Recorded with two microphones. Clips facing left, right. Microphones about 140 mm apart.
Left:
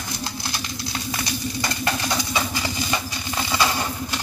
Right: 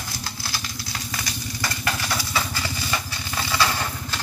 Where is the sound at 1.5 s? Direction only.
20° left (ahead or behind).